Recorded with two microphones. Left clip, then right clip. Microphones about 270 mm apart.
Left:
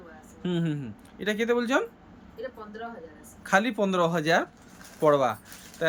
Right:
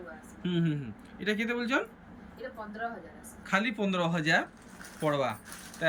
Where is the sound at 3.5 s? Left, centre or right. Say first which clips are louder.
Left 6 dB; centre.